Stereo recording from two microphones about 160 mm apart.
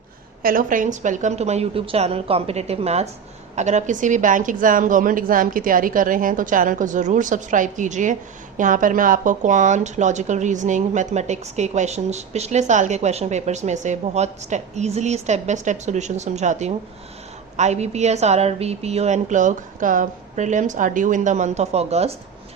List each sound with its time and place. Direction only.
0.4 s a woman's voice: 55° right (ahead or behind); by 22.1 s 40° right (ahead or behind)